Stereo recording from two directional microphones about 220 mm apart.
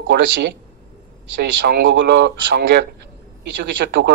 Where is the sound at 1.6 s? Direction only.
50° right (ahead or behind).